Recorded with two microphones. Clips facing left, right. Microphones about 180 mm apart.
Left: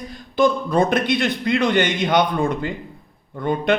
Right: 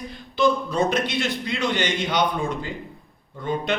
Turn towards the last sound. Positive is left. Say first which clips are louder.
# left 6 dB
turn(degrees=55)  # may be behind; listen again after turning